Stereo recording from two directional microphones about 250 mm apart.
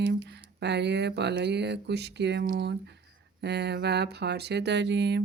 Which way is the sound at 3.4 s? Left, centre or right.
Right.